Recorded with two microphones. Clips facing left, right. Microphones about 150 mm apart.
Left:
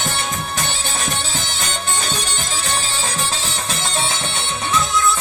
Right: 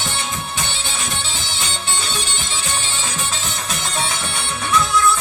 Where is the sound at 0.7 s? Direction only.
45° left (ahead or behind).